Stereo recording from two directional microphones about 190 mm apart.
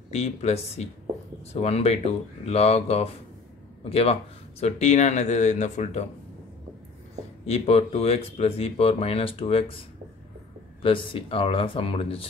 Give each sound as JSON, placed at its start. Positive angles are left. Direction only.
{"t": 0.1, "sound": "speech", "side_deg": 35}
{"t": 7.4, "sound": "speech", "side_deg": 35}
{"t": 10.8, "sound": "speech", "side_deg": 25}